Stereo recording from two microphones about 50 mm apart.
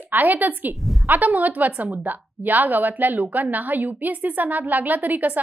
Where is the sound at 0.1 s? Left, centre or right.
Right.